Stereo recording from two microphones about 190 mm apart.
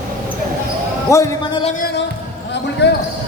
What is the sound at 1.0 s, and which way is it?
Speech, 15° left (ahead or behind).